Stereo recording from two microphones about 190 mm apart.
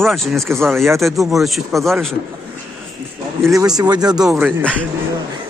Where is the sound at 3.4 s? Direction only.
15° right (ahead or behind).